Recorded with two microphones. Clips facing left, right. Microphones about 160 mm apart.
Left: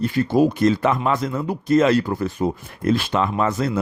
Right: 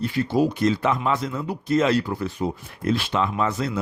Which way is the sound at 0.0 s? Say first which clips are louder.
Left 4 dB; 50° left (ahead or behind).